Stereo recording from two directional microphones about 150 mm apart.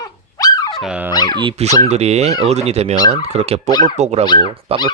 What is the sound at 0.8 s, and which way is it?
Dog, 5° right (ahead or behind).